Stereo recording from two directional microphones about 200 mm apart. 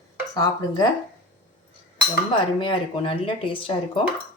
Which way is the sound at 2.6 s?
25° left (ahead or behind).